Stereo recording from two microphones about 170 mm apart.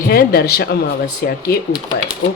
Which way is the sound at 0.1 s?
65° left (ahead or behind).